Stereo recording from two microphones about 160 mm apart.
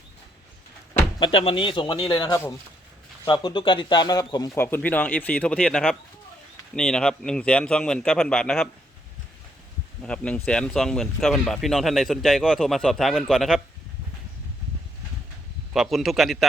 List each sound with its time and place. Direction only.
0.9 s speech: 35° left (ahead or behind); by 8.7 s 5° left (ahead or behind)
10.0 s speech: 5° left (ahead or behind)
15.7 s speech: centre (ahead or behind)